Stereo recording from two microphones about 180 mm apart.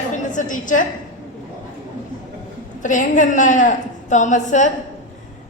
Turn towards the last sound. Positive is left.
turn(degrees=45)  # may be behind; listen again after turning